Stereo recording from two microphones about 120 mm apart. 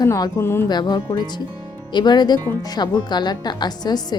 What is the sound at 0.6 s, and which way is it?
Speech, 35° left (ahead or behind).